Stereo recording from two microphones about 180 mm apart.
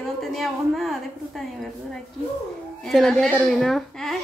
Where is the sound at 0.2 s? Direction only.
Centre (ahead or behind).